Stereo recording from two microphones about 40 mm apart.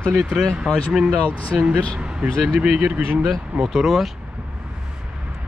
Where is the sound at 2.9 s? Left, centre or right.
Right.